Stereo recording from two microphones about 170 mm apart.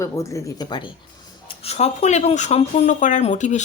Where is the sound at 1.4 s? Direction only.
40° left (ahead or behind).